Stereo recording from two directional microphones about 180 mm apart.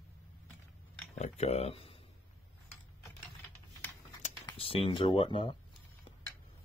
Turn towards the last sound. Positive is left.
turn(degrees=30)  # may be behind; listen again after turning